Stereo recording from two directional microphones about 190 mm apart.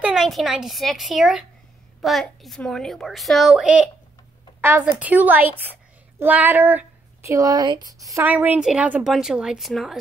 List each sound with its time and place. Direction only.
0.0 s a woman's voice: centre (ahead or behind)